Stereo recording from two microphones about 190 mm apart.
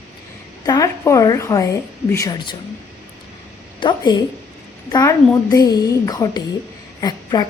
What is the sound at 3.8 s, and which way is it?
Speech, 20° left (ahead or behind).